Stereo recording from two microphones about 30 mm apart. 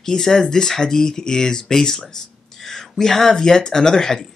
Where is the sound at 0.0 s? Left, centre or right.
Centre.